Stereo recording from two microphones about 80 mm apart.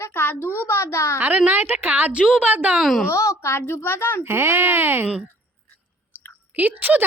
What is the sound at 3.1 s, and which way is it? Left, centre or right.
A woman's voice, left.